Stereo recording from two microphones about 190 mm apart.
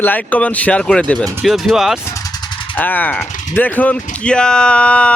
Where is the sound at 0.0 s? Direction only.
10° left (ahead or behind).